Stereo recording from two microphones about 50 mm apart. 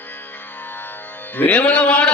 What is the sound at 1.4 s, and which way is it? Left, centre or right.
Speech, left.